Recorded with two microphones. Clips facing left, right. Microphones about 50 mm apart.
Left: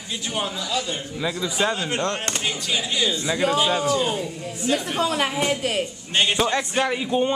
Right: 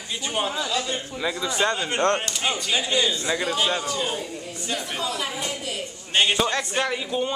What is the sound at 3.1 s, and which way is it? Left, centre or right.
Speech, centre.